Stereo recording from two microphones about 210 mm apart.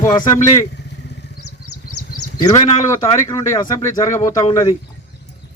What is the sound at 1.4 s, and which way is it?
Vehicle, 90° left.